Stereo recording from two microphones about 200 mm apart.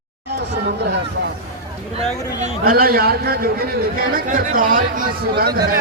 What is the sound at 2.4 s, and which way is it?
A man's voice, 45° right (ahead or behind).